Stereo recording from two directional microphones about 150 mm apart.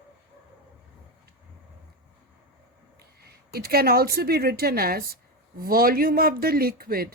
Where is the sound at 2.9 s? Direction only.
90° right.